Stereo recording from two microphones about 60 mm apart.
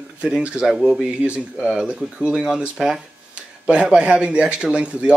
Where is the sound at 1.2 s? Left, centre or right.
Centre.